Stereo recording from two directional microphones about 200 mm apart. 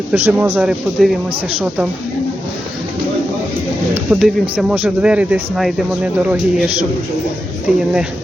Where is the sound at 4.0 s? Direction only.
5° right (ahead or behind).